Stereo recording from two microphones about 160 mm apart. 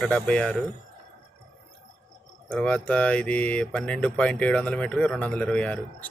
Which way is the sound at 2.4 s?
10° left (ahead or behind).